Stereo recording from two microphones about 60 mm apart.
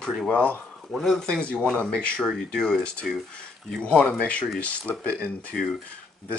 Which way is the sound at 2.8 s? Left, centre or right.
Centre.